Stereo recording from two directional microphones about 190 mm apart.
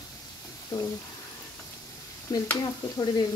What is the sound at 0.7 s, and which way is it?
Speech, 20° left (ahead or behind).